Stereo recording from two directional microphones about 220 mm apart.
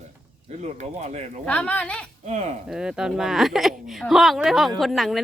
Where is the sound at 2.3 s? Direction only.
30° right (ahead or behind).